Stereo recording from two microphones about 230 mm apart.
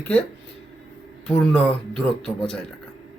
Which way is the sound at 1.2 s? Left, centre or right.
Centre.